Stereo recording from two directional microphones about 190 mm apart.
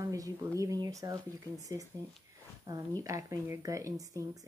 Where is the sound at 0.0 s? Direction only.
20° right (ahead or behind).